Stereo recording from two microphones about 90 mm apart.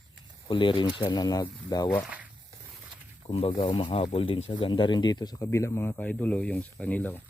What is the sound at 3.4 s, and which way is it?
Speech, 80° left.